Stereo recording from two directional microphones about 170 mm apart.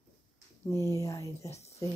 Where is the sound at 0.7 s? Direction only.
20° left (ahead or behind).